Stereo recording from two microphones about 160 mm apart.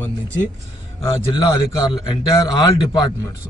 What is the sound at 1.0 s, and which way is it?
Speech, 25° left (ahead or behind).